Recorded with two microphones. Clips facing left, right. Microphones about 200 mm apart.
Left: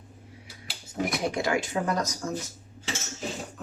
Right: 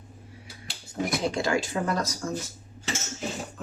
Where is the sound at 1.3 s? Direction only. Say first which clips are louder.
Right 1 dB; 20° left (ahead or behind).